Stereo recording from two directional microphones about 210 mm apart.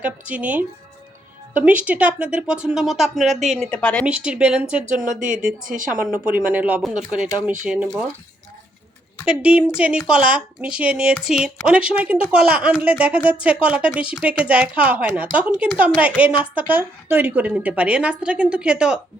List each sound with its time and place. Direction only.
0.0 s a woman's voice: 5° right (ahead or behind)
4.0 s speech: 5° right (ahead or behind)
5.0 s speech: 40° right (ahead or behind)
6.1 s a woman's voice: 5° right (ahead or behind)
9.2 s a woman's voice: 5° right (ahead or behind)